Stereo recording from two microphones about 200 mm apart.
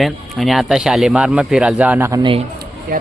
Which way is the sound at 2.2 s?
25° right (ahead or behind).